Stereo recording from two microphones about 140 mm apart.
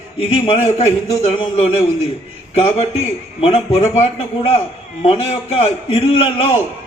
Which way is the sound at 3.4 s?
45° left (ahead or behind).